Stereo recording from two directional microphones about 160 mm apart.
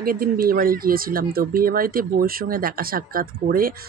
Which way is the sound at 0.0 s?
65° right (ahead or behind).